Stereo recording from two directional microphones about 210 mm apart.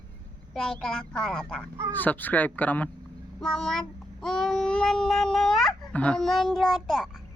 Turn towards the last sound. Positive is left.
turn(degrees=0)  # may be behind; listen again after turning